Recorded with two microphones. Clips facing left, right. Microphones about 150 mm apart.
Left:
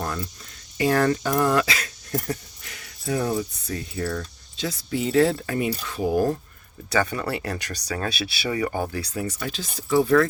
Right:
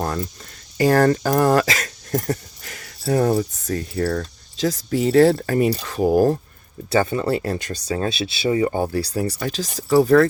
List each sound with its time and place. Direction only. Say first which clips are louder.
0.0 s a sound: right 5 dB; 40° right (ahead or behind)
0.8 s speech: right 5 dB; 40° right (ahead or behind)
6.9 s speech: right 5 dB; 25° right (ahead or behind)